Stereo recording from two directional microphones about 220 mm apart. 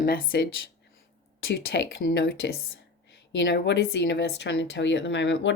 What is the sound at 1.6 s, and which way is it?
Speech, 50° left (ahead or behind).